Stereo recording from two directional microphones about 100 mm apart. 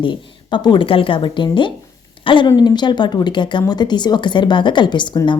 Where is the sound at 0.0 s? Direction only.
55° left (ahead or behind).